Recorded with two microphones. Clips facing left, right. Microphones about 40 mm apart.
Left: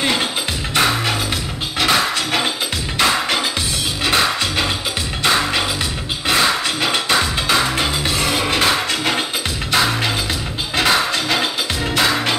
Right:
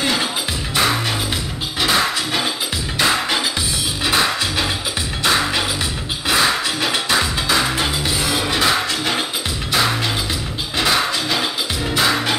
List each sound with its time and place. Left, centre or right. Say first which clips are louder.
0.0 s music: left 1 dB; left
5.2 s music: left 1 dB; centre
10.8 s music: left 1 dB; centre